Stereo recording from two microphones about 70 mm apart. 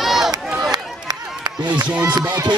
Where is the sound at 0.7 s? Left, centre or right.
Right.